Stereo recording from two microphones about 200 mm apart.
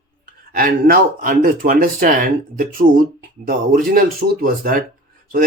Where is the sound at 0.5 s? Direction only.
50° right (ahead or behind).